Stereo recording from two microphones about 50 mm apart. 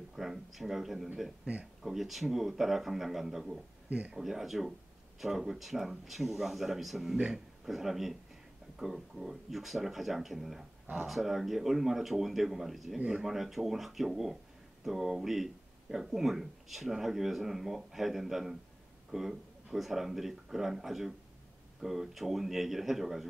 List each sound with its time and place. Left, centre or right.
0.1 s speech: centre
1.4 s speech: right
1.8 s speech: centre